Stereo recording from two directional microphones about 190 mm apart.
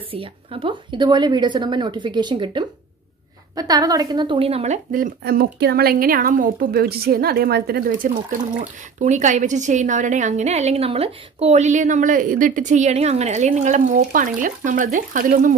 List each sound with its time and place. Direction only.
0.1 s a woman's voice: 30° right (ahead or behind)
4.9 s speech: 50° right (ahead or behind)
6.7 s speech: 55° right (ahead or behind)